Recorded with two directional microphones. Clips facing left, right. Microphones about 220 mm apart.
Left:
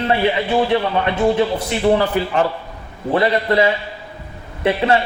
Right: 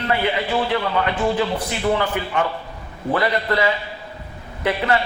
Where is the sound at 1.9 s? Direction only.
35° left (ahead or behind).